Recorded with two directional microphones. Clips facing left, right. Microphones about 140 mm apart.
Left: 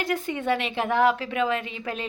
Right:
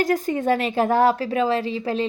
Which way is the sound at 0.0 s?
40° right (ahead or behind).